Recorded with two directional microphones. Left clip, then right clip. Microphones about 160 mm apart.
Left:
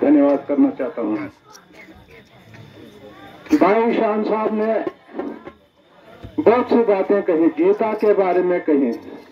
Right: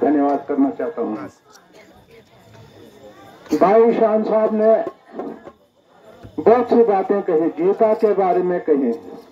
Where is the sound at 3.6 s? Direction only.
45° right (ahead or behind).